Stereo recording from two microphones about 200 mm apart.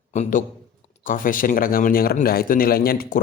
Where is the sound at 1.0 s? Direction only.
40° left (ahead or behind).